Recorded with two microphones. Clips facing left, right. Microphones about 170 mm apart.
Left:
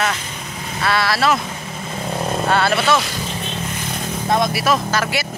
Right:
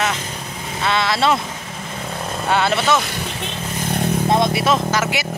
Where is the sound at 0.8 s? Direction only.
20° right (ahead or behind).